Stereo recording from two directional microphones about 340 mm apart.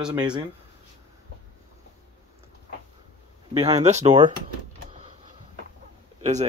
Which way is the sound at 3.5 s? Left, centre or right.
Centre.